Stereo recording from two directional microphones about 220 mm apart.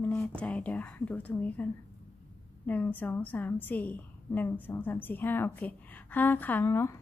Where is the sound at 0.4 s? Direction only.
5° left (ahead or behind).